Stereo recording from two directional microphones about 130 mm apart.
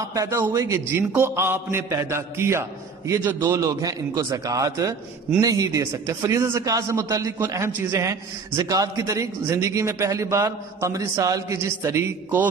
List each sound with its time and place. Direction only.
0.1 s a man's voice: 25° right (ahead or behind)